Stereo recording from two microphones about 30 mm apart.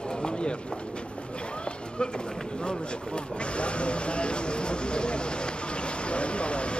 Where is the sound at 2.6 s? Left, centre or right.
Left.